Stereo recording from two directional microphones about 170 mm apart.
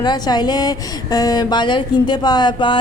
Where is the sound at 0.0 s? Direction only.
25° left (ahead or behind).